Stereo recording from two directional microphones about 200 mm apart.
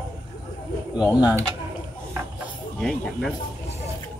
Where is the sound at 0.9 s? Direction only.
5° right (ahead or behind).